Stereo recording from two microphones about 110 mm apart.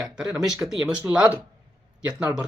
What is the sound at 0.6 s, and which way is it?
Speech, 5° right (ahead or behind).